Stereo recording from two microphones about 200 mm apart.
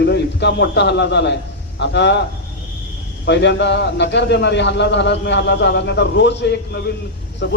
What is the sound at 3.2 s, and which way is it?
A man's voice, 60° left (ahead or behind).